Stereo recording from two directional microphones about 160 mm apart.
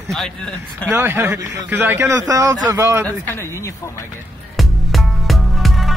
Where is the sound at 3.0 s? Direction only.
15° left (ahead or behind).